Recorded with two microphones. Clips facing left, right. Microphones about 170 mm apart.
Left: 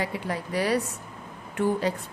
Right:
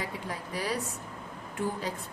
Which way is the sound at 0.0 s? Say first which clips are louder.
Left 7 dB; 70° left (ahead or behind).